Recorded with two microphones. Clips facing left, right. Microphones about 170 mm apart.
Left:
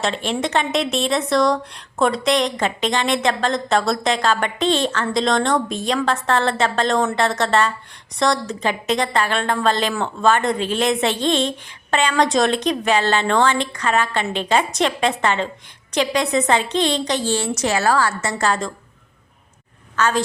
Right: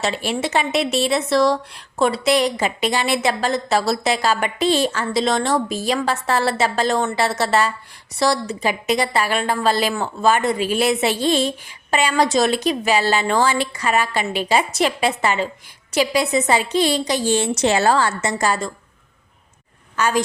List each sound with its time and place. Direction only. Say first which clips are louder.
0.0 s speech: even; 5° right (ahead or behind)
17.6 s a woman's voice: right 1 dB; 25° right (ahead or behind); by 18.7 s 10° right (ahead or behind)
20.0 s speech: even; 10° right (ahead or behind)